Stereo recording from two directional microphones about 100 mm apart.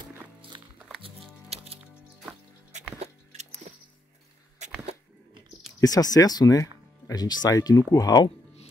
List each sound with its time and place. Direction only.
1.5 s music: 90° right
5.8 s speech: 40° left (ahead or behind)